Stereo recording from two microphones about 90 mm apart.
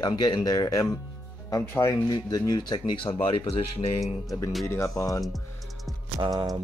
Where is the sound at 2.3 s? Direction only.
50° left (ahead or behind); by 4.0 s 90° left.